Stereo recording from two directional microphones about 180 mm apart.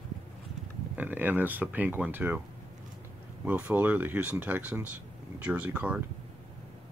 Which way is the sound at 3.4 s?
10° right (ahead or behind).